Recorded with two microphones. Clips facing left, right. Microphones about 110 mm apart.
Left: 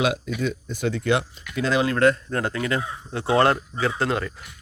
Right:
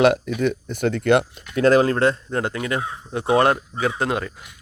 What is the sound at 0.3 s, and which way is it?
Speech, 60° right (ahead or behind).